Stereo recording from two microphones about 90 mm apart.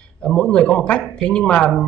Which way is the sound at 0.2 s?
10° left (ahead or behind).